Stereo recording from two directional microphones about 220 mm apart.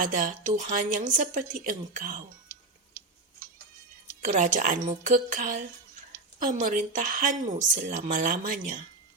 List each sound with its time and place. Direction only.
0.0 s a woman's voice: 35° right (ahead or behind)
4.2 s a woman's voice: 35° right (ahead or behind)